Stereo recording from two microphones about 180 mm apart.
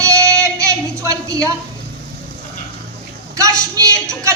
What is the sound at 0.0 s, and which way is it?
Music, 15° right (ahead or behind).